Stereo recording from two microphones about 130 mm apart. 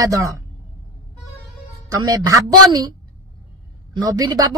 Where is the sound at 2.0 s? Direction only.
30° right (ahead or behind).